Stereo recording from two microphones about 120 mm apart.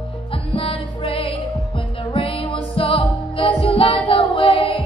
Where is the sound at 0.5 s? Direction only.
50° left (ahead or behind).